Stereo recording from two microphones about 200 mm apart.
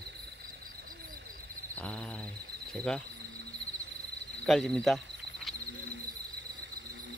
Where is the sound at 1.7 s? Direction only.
5° left (ahead or behind).